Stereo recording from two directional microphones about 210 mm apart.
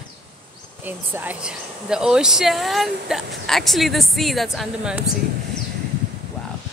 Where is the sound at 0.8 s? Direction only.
10° right (ahead or behind).